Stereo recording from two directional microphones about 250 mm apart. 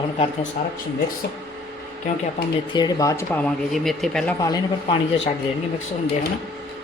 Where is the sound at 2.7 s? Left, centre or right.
Centre.